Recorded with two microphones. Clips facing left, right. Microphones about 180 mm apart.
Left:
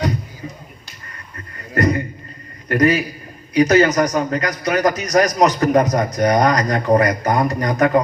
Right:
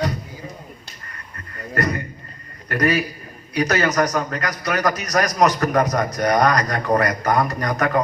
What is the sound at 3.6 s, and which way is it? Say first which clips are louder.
A man's voice: left 6 dB; 20° left (ahead or behind).